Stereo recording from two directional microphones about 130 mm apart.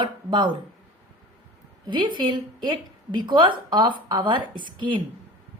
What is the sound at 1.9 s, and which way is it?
A woman's voice, 35° right (ahead or behind).